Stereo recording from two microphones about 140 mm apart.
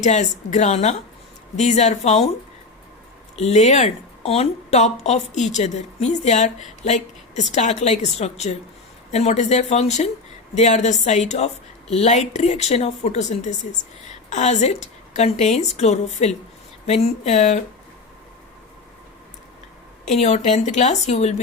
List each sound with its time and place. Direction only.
0.0 s a woman's voice: 55° left (ahead or behind)
3.3 s a woman's voice: 50° left (ahead or behind)
20.1 s a woman's voice: 55° left (ahead or behind)